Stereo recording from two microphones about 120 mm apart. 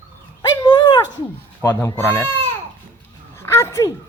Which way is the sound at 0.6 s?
40° left (ahead or behind).